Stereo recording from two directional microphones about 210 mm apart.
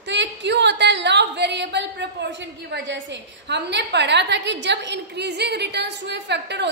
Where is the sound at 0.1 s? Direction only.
55° right (ahead or behind).